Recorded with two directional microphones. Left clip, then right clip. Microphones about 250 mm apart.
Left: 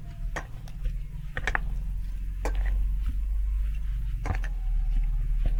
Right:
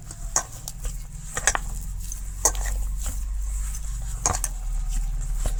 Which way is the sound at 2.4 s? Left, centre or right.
Right.